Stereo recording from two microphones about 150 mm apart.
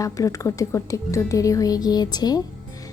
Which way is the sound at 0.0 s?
20° left (ahead or behind).